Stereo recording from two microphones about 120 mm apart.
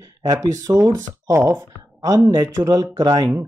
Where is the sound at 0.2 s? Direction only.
35° right (ahead or behind).